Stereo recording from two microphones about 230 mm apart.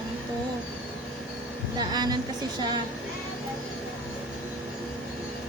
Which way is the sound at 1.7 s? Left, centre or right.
Centre.